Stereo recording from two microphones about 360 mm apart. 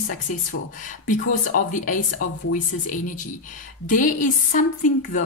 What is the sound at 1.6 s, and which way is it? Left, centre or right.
Speech, left.